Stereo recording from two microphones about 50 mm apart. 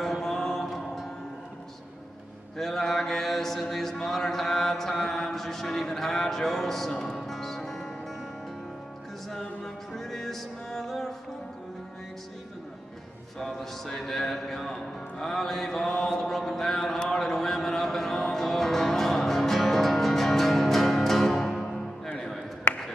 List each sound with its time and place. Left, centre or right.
0.0 s music: centre
2.5 s mantra: centre
9.3 s music: centre
13.4 s speech: centre